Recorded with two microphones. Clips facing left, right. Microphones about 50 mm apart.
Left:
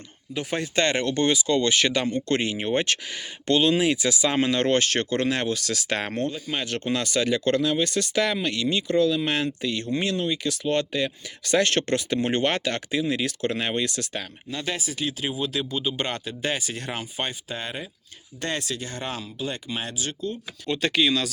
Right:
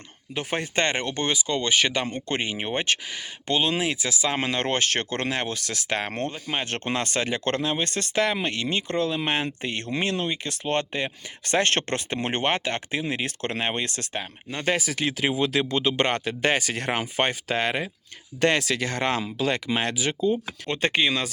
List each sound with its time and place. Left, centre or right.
0.3 s speech: right; by 4.4 s centre
4.4 s speech: right
5.5 s speech: centre
6.1 s speech: right
12.5 s speech: centre; by 14.1 s right
14.6 s speech: right
15.8 s speech: right
16.0 s speech: right
17.0 s speech: right
20.7 s speech: right